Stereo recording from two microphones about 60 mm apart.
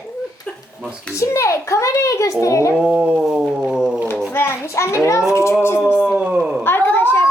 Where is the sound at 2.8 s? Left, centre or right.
Right.